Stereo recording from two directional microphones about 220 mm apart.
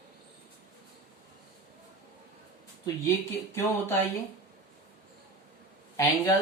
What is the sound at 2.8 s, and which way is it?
Speech, 15° left (ahead or behind).